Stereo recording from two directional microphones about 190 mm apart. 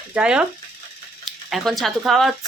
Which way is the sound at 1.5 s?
Centre (ahead or behind).